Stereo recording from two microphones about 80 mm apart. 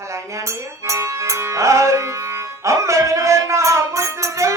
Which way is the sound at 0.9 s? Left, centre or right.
Right.